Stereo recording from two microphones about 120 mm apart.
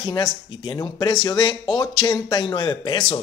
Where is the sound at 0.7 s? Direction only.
30° left (ahead or behind).